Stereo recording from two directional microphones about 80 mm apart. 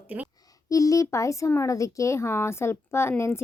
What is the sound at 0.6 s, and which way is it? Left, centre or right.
Speech, left.